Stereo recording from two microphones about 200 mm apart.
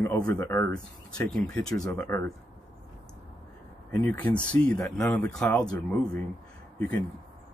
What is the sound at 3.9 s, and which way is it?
Speech, 10° left (ahead or behind).